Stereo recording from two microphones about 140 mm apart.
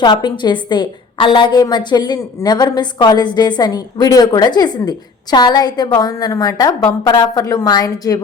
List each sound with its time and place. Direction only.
0.0 s a woman's voice: 30° left (ahead or behind)